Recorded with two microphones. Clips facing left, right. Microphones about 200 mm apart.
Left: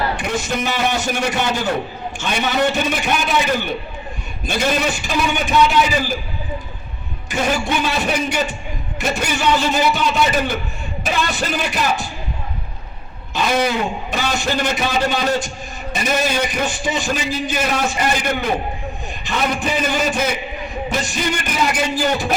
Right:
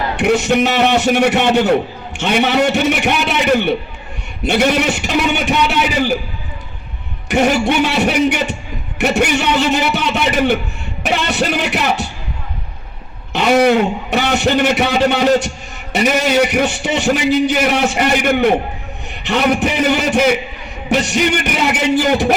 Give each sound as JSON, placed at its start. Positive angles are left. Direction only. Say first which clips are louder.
{"t": 0.2, "sound": "a man's voice", "louder": "right 9 dB", "side_deg": -70}
{"t": 7.3, "sound": "a man's voice", "louder": "right 6 dB", "side_deg": -70}
{"t": 13.3, "sound": "a man's voice", "louder": "right 7 dB", "side_deg": -70}